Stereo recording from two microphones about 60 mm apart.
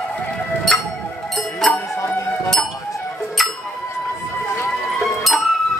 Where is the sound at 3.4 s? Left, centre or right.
Centre.